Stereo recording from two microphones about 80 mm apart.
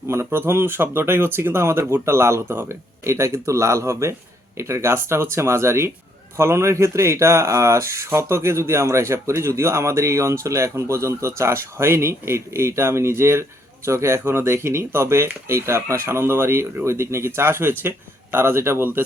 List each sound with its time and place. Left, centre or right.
0.1 s speech: right